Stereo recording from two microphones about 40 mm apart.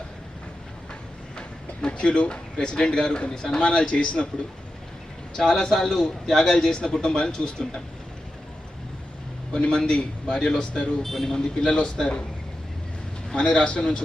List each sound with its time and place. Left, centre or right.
1.4 s speech: left
5.4 s a man's voice: centre
9.5 s a man's voice: left; by 11.3 s centre
11.3 s a man's voice: centre
13.3 s a man's voice: left